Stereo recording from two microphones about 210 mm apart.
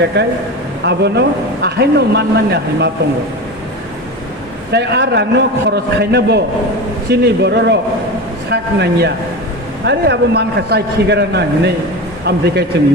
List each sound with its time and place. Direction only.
0.1 s a man's voice: 55° right (ahead or behind)
4.7 s a man's voice: 50° right (ahead or behind)